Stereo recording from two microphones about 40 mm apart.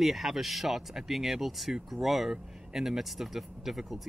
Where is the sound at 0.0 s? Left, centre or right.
Centre.